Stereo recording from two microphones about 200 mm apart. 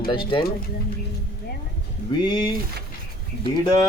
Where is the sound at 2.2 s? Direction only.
20° left (ahead or behind).